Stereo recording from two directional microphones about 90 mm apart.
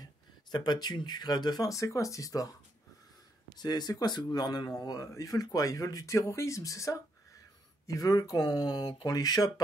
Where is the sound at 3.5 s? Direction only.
50° left (ahead or behind).